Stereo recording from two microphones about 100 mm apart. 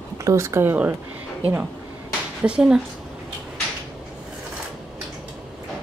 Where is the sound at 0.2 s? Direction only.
30° right (ahead or behind); by 2.8 s 10° right (ahead or behind).